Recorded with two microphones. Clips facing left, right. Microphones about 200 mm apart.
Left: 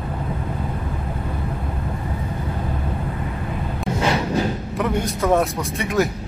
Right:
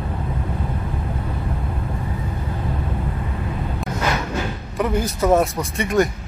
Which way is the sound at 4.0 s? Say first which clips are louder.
Left 4 dB; 30° left (ahead or behind).